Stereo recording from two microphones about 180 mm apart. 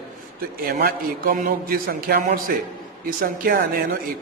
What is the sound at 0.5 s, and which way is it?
A man's voice, 55° right (ahead or behind).